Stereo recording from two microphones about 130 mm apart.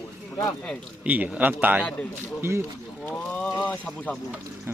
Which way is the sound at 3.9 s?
10° left (ahead or behind).